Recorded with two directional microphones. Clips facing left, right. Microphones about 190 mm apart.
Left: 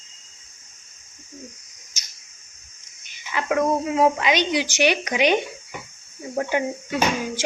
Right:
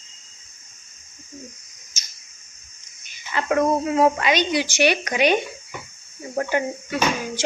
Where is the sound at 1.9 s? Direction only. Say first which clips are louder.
Right 1 dB; 15° left (ahead or behind).